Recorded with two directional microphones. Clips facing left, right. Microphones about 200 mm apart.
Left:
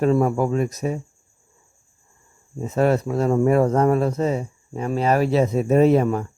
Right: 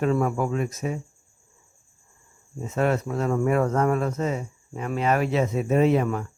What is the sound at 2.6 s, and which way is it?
Speech, 35° left (ahead or behind).